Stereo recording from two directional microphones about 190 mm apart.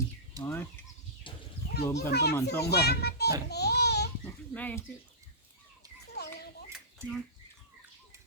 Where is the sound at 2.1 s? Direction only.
60° left (ahead or behind).